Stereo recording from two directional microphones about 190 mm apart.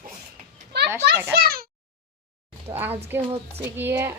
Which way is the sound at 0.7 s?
60° right (ahead or behind).